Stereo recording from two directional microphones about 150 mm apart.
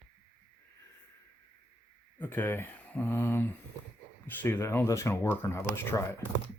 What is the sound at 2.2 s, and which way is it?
Speech, 15° left (ahead or behind).